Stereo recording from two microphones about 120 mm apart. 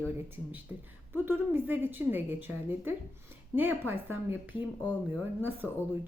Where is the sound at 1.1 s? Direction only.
15° right (ahead or behind).